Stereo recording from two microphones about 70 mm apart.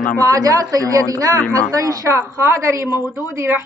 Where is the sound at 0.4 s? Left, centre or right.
Right.